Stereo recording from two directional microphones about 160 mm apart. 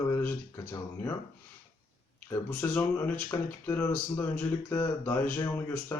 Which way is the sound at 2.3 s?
15° left (ahead or behind).